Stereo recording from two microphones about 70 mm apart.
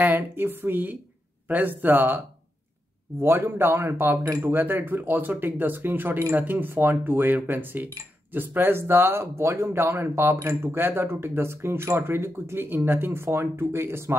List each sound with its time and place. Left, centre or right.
0.0 s speech: right